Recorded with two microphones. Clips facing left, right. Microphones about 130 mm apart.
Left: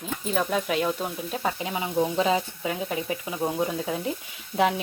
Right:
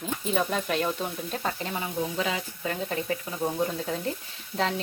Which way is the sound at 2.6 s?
15° left (ahead or behind).